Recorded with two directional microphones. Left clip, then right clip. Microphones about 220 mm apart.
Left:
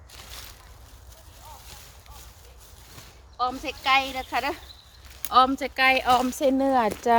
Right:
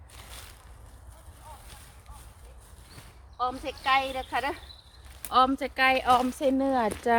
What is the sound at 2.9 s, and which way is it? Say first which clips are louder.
Speech: left 3 dB; 30° left (ahead or behind).